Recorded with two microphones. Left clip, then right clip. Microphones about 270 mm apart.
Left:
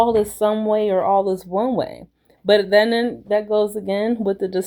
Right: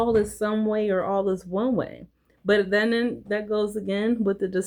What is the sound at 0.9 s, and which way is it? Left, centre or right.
Speech, left.